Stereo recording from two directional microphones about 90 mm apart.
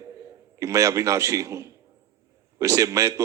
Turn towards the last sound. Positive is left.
turn(degrees=-35)  # may be behind; listen again after turning